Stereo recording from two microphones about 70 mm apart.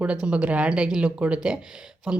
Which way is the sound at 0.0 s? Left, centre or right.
Centre.